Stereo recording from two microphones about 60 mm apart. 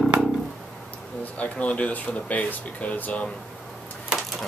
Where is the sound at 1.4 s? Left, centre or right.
Left.